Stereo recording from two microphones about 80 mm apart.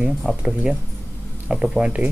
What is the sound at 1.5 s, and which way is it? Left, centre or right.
Speech, centre.